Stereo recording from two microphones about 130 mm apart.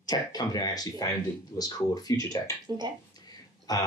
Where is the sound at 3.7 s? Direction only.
30° left (ahead or behind).